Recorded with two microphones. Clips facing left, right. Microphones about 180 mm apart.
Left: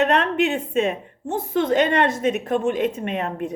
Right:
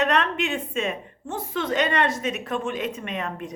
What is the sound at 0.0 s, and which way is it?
A woman's voice, 55° left (ahead or behind).